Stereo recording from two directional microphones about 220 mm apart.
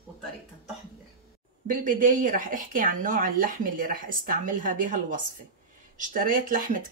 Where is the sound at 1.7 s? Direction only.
35° right (ahead or behind).